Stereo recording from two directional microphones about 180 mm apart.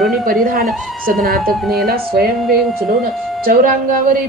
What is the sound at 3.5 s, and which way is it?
Speech, 55° right (ahead or behind).